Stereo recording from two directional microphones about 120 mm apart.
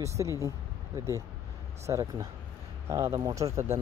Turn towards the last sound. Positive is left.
turn(degrees=-25)  # may be behind; listen again after turning